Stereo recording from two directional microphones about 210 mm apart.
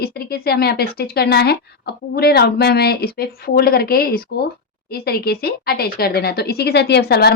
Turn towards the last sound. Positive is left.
turn(degrees=50)  # may be behind; listen again after turning